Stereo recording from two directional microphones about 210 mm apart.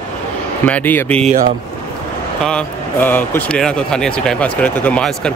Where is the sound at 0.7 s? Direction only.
10° left (ahead or behind).